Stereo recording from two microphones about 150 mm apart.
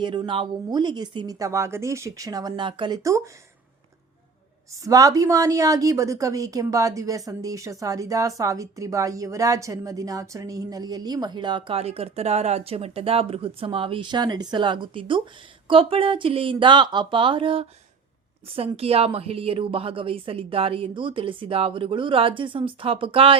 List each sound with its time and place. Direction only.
0.0 s speech: 30° right (ahead or behind)
4.7 s a woman's voice: 20° right (ahead or behind); by 23.4 s 35° right (ahead or behind)